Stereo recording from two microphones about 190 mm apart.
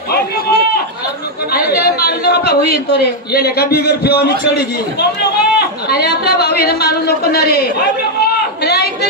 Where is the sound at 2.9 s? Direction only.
55° left (ahead or behind).